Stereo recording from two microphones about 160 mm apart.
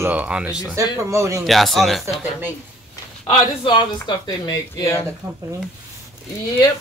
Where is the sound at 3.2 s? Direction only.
30° left (ahead or behind).